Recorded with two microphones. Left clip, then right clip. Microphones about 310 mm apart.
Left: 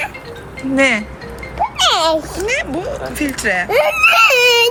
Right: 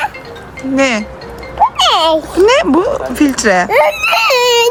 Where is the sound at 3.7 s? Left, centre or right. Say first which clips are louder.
Right 1 dB; centre.